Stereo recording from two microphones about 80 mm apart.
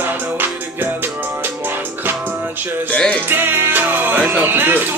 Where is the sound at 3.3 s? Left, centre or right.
Right.